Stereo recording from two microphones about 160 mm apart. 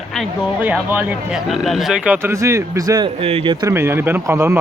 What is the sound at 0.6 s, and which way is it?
Speech, 10° right (ahead or behind).